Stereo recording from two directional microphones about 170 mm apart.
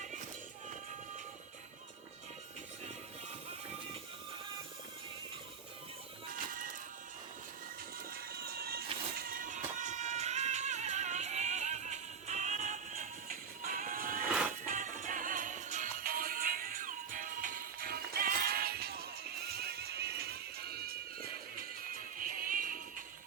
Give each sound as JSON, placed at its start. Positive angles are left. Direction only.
{"t": 6.5, "sound": "music", "side_deg": -55}
{"t": 7.9, "sound": "music", "side_deg": -60}